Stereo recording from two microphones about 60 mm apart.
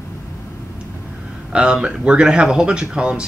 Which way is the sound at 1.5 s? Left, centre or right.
Centre.